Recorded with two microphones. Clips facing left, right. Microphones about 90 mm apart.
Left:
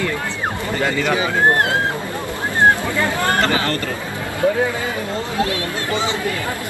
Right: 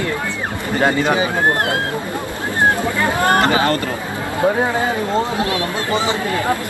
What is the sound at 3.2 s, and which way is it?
Speech, 20° right (ahead or behind).